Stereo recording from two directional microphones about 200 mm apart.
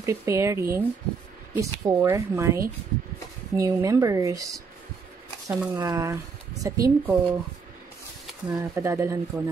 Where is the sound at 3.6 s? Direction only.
15° right (ahead or behind).